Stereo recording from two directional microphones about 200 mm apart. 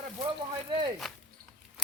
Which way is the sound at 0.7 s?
25° right (ahead or behind).